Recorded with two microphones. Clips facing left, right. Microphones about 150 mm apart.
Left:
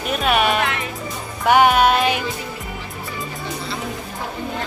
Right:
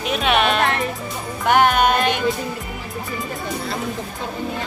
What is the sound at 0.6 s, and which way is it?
Speech, 40° right (ahead or behind).